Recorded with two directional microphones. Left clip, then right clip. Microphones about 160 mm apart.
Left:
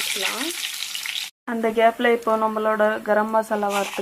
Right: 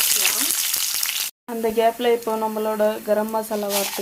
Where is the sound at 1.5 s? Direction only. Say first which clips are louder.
Left 1 dB; 10° left (ahead or behind).